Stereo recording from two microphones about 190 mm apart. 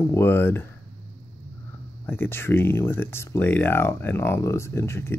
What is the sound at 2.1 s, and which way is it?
Speech, 10° left (ahead or behind).